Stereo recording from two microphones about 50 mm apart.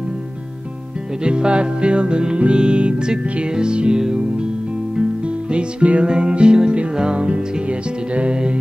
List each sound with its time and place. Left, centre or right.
1.2 s music: centre
5.5 s music: right